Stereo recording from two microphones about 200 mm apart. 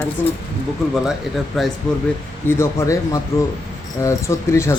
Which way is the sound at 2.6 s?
15° left (ahead or behind).